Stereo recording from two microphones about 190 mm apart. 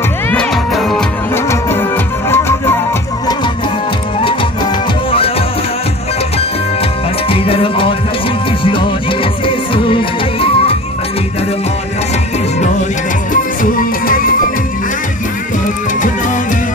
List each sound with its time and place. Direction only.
0.3 s music: 5° left (ahead or behind)
1.3 s music: 10° left (ahead or behind)
7.2 s music: 30° left (ahead or behind)
13.3 s music: 45° left (ahead or behind)